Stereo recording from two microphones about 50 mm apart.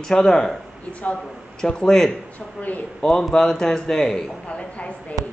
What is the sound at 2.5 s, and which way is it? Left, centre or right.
Speech, left.